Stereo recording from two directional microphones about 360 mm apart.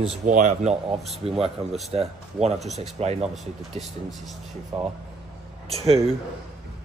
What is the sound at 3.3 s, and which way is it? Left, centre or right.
Speech, centre.